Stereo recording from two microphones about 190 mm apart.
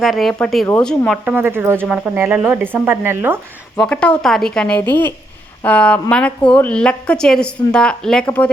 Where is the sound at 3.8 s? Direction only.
5° left (ahead or behind).